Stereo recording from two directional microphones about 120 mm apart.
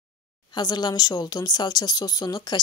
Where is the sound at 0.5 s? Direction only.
35° left (ahead or behind).